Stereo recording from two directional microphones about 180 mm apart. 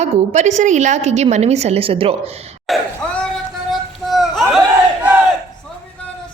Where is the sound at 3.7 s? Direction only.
Centre (ahead or behind).